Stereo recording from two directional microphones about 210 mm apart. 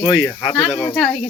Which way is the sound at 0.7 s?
20° left (ahead or behind).